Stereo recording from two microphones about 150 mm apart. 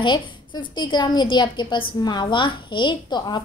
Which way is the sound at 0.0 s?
30° left (ahead or behind).